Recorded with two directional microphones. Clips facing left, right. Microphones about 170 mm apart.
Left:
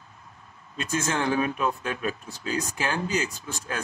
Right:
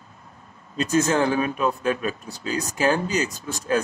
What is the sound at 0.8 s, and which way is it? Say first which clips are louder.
Speech: right 7 dB; 35° right (ahead or behind).